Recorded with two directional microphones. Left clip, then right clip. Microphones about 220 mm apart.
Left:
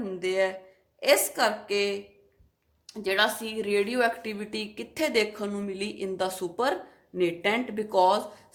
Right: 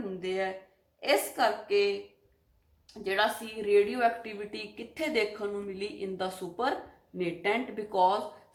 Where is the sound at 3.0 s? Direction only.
50° left (ahead or behind).